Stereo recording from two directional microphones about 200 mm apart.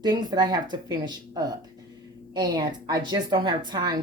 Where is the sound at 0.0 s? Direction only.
20° right (ahead or behind).